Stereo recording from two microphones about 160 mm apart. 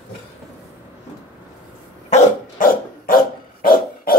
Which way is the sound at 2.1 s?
60° left (ahead or behind).